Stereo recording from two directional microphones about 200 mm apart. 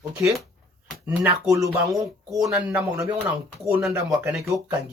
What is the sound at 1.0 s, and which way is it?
A man's voice, 5° right (ahead or behind).